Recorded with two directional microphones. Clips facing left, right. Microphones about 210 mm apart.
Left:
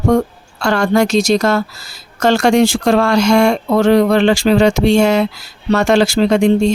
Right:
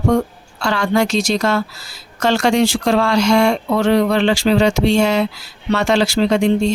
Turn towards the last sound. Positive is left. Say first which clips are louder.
# left 3 dB
turn(degrees=50)  # may be behind; listen again after turning